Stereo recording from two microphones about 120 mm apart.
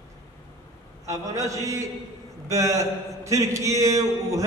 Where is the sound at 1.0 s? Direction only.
25° right (ahead or behind).